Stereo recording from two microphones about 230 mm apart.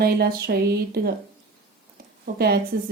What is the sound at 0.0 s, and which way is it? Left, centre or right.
A woman's voice, right.